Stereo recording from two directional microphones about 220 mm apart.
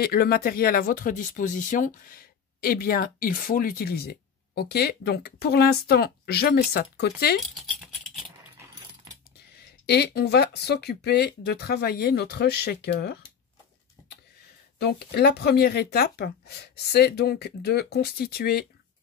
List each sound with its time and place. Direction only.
0.0 s speech: 45° left (ahead or behind)
9.8 s speech: 45° left (ahead or behind)
14.8 s speech: 45° left (ahead or behind)